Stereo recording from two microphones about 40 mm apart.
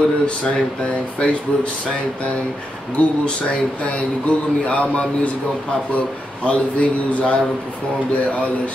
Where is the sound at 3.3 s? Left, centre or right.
Left.